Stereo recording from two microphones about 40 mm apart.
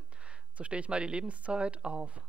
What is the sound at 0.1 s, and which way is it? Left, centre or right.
Speech, right.